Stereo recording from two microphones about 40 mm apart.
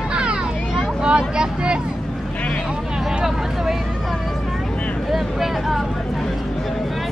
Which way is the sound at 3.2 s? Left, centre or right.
Centre.